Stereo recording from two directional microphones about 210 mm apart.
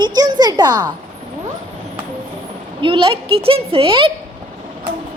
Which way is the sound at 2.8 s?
25° right (ahead or behind).